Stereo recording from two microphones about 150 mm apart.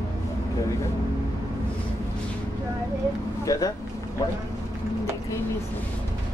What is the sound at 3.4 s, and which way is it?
Vehicle, 25° left (ahead or behind).